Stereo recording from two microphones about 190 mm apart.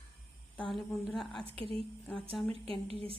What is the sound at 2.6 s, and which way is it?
Speech, 30° right (ahead or behind).